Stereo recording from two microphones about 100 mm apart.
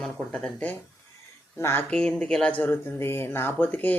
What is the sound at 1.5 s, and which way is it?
Speech, 25° left (ahead or behind).